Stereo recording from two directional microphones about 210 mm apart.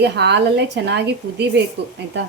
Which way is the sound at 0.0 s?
55° right (ahead or behind).